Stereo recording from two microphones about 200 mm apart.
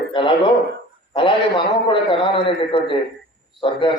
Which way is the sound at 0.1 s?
25° left (ahead or behind).